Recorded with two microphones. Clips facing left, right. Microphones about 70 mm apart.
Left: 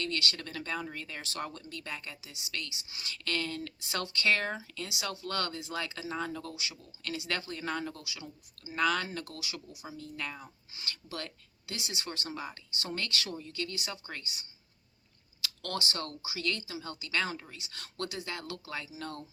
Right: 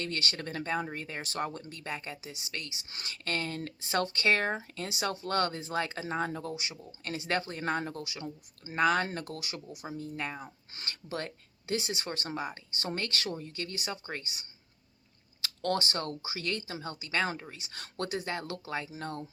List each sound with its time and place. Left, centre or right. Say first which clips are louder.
0.0 s speech: even; right